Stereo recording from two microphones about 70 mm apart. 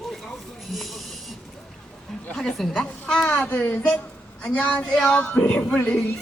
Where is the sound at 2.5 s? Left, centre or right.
Centre.